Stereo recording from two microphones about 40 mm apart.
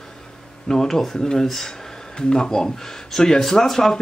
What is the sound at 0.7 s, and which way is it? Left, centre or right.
Speech, centre.